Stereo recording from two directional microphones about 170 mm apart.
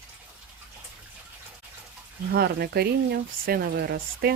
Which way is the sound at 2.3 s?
70° right (ahead or behind).